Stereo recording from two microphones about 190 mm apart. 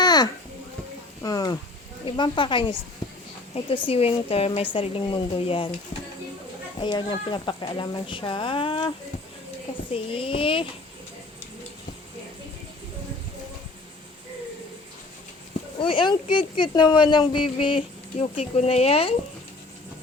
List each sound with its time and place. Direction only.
0.0 s a sound: 20° left (ahead or behind)
1.2 s speech: 20° left (ahead or behind)
3.8 s speech: 30° left (ahead or behind)
6.8 s speech: 25° left (ahead or behind)
9.9 s speech: 30° left (ahead or behind)
15.8 s speech: 25° left (ahead or behind)